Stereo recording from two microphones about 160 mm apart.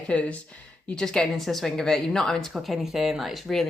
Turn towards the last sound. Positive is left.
turn(degrees=0)  # may be behind; listen again after turning